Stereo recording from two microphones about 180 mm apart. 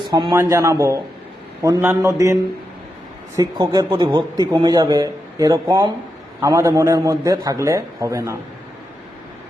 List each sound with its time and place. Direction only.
0.1 s a man's voice: 20° right (ahead or behind)